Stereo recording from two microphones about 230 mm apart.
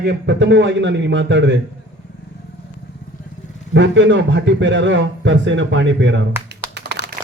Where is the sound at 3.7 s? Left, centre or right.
Right.